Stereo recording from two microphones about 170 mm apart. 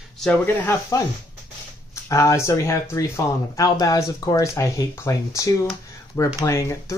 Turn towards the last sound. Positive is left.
turn(degrees=15)  # may be behind; listen again after turning